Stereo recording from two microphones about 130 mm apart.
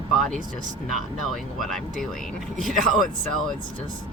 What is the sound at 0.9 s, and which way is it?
Speech, centre (ahead or behind).